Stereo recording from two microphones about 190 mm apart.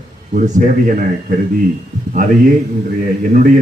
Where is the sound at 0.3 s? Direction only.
45° right (ahead or behind).